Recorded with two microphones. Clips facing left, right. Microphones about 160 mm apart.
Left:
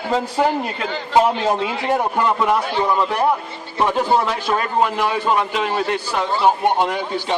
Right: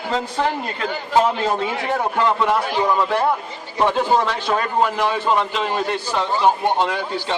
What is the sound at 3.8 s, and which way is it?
A man's voice, 10° left (ahead or behind).